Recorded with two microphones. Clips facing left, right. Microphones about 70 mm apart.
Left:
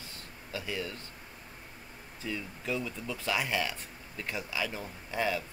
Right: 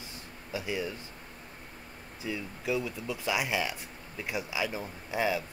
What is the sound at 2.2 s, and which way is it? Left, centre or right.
Speech, centre.